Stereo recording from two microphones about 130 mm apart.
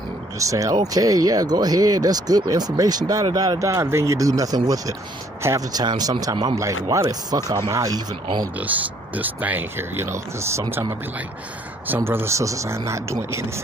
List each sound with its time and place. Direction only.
0.4 s speech: 25° right (ahead or behind)
8.5 s speech: 10° right (ahead or behind)